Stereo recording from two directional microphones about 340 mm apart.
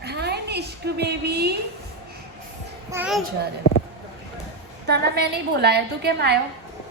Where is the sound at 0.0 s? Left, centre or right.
Right.